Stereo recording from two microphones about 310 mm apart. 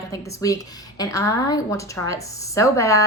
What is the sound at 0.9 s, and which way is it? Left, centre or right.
A woman's voice, centre.